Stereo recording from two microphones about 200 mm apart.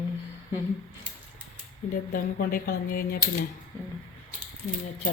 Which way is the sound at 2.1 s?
45° left (ahead or behind).